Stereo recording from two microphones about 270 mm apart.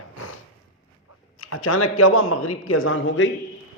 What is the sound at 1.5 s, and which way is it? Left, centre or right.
Speech, left.